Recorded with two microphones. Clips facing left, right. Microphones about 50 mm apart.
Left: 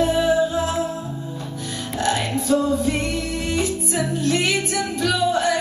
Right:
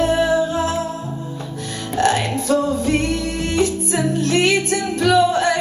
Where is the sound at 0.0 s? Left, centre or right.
Right.